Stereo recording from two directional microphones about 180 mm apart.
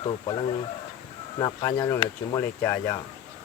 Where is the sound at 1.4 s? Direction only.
20° left (ahead or behind).